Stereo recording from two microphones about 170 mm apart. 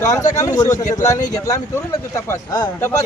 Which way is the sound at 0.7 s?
45° left (ahead or behind).